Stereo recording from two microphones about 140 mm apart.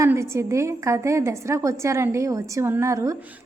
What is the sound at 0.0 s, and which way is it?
A woman's voice, 20° right (ahead or behind).